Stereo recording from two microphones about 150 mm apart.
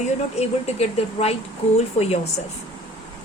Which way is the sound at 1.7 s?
45° left (ahead or behind).